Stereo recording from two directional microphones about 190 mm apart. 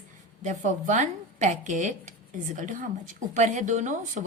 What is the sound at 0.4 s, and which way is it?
A woman's voice, 40° right (ahead or behind).